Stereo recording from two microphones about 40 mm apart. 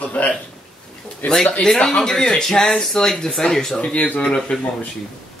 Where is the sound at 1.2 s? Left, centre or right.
Left.